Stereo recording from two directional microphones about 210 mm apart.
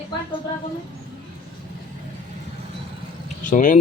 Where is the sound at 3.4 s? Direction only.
40° left (ahead or behind).